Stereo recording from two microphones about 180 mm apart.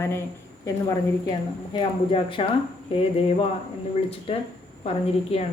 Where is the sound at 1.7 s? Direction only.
30° left (ahead or behind).